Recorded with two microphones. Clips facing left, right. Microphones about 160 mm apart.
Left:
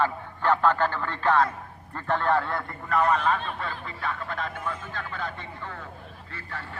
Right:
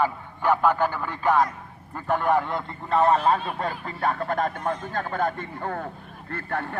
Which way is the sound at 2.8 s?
30° right (ahead or behind).